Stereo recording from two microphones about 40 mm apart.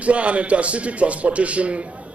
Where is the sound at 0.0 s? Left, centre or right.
Right.